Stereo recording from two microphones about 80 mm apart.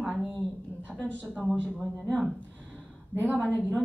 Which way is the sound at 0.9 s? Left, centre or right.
Centre.